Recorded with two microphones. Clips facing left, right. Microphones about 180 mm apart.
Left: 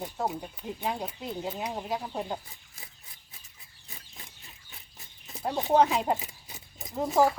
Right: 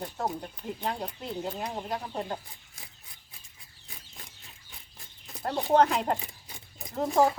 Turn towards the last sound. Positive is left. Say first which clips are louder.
# even
turn(degrees=5)  # may be behind; listen again after turning